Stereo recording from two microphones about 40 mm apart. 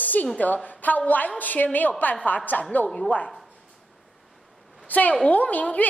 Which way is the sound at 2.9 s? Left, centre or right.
Left.